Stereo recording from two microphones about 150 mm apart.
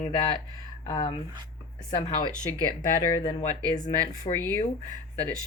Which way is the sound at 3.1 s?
25° left (ahead or behind).